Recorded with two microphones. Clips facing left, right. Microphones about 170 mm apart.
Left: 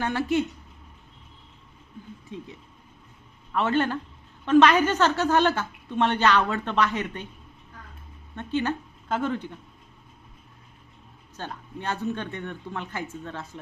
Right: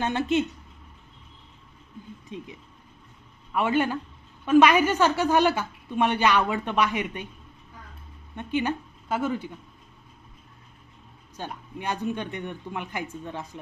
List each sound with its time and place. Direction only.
0.0 s speech: 20° right (ahead or behind)
2.3 s a woman's voice: 20° right (ahead or behind)
3.5 s a woman's voice: 10° right (ahead or behind)
8.4 s a woman's voice: 15° right (ahead or behind)
11.3 s a woman's voice: 15° right (ahead or behind)